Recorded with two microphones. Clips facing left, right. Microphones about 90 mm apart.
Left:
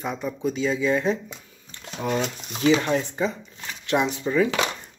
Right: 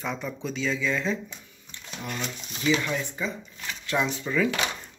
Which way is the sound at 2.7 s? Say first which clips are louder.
Left 4 dB; 40° left (ahead or behind).